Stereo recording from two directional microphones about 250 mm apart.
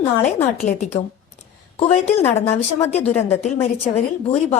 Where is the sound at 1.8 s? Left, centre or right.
Left.